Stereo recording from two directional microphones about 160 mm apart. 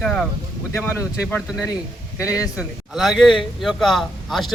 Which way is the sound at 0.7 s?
15° left (ahead or behind).